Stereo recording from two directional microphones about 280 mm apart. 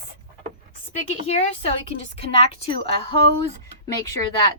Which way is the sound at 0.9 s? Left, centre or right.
Left.